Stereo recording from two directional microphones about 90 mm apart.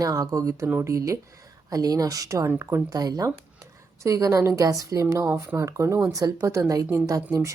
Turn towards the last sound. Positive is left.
turn(degrees=-35)  # may be behind; listen again after turning